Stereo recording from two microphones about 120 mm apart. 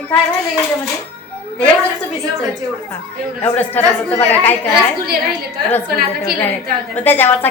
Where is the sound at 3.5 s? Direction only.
15° left (ahead or behind).